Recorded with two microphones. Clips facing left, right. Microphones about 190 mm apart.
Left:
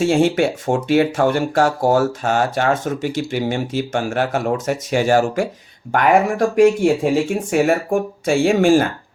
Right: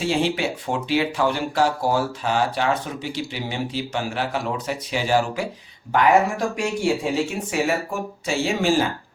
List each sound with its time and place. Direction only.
0.0 s speech: 50° left (ahead or behind)